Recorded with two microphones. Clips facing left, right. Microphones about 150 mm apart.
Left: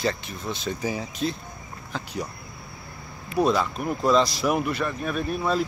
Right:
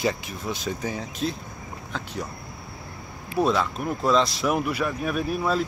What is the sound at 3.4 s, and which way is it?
Speech, centre (ahead or behind).